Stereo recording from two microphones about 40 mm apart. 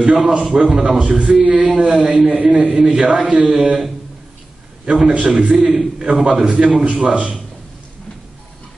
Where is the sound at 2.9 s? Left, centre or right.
Right.